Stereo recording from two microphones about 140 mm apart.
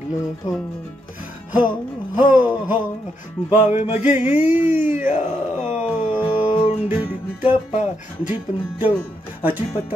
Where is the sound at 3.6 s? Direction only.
55° left (ahead or behind).